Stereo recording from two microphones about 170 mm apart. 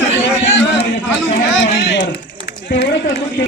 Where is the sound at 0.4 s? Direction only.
90° left.